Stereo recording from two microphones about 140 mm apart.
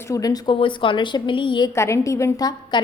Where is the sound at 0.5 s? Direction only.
35° left (ahead or behind).